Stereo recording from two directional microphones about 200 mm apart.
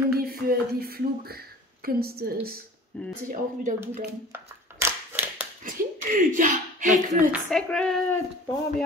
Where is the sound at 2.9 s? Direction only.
5° left (ahead or behind).